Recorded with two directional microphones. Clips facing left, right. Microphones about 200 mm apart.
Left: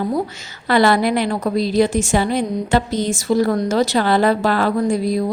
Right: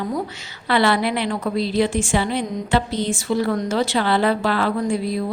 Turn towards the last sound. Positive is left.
turn(degrees=40)  # may be behind; listen again after turning